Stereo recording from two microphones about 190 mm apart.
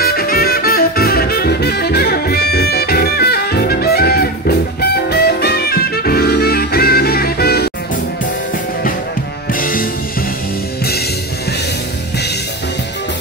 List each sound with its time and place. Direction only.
0.0 s music: 55° left (ahead or behind)
9.5 s music: 45° left (ahead or behind)